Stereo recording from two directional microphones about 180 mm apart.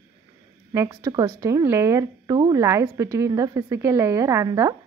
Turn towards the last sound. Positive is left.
turn(degrees=-20)  # may be behind; listen again after turning